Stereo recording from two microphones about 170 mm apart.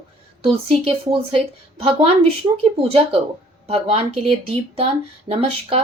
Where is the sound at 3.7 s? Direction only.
35° right (ahead or behind).